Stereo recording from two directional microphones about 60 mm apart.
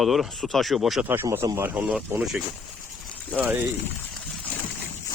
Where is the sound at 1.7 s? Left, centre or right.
Right.